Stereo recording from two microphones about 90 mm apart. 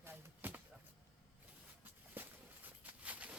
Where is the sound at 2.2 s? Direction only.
20° right (ahead or behind).